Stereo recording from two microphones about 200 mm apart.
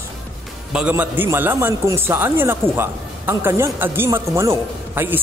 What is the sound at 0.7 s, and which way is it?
A man's voice, 10° right (ahead or behind).